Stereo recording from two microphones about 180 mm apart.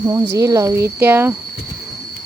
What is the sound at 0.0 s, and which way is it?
Speech, 20° right (ahead or behind).